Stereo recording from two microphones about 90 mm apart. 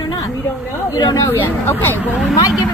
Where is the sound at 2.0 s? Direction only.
15° right (ahead or behind).